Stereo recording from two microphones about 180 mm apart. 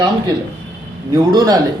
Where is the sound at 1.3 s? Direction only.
20° right (ahead or behind).